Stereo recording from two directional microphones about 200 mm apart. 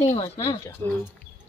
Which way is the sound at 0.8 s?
15° left (ahead or behind).